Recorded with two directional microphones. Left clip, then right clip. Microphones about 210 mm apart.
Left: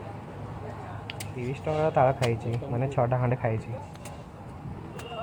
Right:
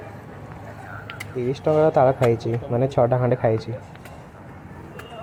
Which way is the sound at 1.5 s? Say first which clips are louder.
Right 9 dB; 30° right (ahead or behind).